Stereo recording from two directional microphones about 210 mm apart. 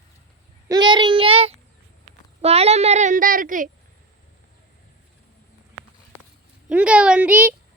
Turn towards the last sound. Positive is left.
turn(degrees=-10)  # may be behind; listen again after turning